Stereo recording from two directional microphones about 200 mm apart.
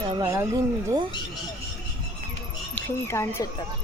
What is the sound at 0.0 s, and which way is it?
Speech, 20° right (ahead or behind).